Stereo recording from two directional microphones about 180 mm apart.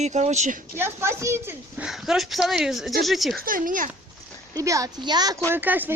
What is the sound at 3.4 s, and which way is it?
Speech, 50° right (ahead or behind).